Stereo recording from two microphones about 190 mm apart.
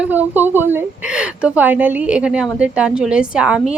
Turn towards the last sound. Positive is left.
turn(degrees=-5)  # may be behind; listen again after turning